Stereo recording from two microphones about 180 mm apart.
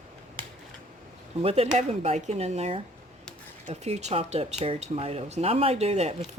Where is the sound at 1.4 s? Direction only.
35° right (ahead or behind).